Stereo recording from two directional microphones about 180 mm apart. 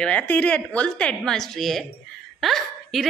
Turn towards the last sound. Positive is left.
turn(degrees=0)  # may be behind; listen again after turning